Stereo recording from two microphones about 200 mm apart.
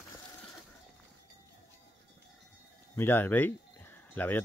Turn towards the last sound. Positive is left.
turn(degrees=10)  # may be behind; listen again after turning